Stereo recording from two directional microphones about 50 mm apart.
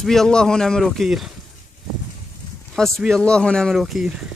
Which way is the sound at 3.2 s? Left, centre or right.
Centre.